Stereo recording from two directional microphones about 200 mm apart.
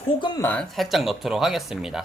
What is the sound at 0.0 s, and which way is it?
Speech, 25° left (ahead or behind).